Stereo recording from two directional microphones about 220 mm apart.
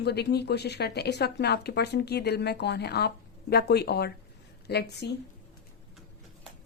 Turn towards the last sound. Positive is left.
turn(degrees=50)  # may be behind; listen again after turning